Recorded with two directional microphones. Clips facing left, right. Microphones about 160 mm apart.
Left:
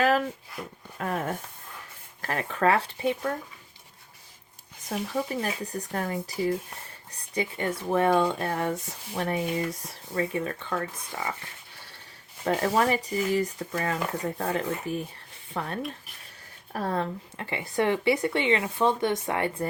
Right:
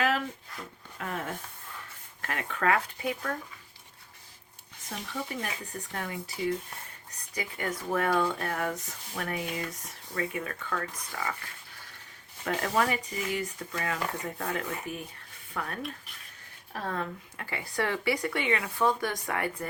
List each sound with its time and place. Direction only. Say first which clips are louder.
0.5 s speech: left 5 dB; 10° left (ahead or behind)
0.9 s speech: left 5 dB; 40° left (ahead or behind)
4.9 s speech: left 7 dB; 35° left (ahead or behind)
7.3 s speech: left 5 dB; 25° left (ahead or behind)
12.5 s speech: left 4 dB; 35° left (ahead or behind)
16.8 s speech: left 5 dB; 35° left (ahead or behind)
17.3 s speech: left 5 dB; 25° left (ahead or behind)